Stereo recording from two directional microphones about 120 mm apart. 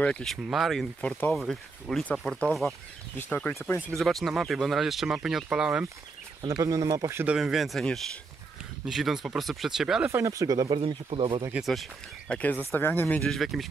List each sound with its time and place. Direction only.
0.0 s speech: 5° left (ahead or behind)
1.0 s speech: 15° left (ahead or behind)
1.3 s speech: centre (ahead or behind)
4.0 s speech: centre (ahead or behind)
6.4 s speech: 30° right (ahead or behind)
7.3 s speech: 5° right (ahead or behind)
10.1 s speech: 25° right (ahead or behind)
10.8 s speech: 50° right (ahead or behind)
11.5 s speech: centre (ahead or behind)
12.4 s speech: 15° left (ahead or behind)
13.2 s speech: centre (ahead or behind)